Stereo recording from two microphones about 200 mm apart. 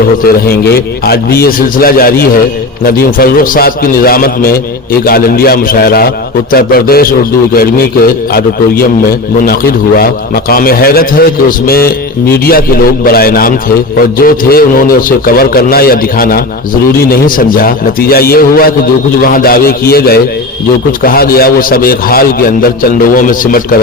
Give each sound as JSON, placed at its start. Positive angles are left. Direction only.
{"t": 0.4, "sound": "a man's voice", "side_deg": 50}